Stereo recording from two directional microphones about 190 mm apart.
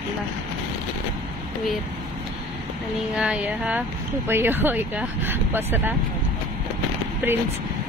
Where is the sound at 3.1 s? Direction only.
5° right (ahead or behind).